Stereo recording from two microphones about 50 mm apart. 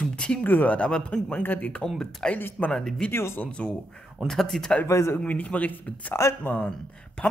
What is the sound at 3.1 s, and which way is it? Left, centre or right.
Speech, left.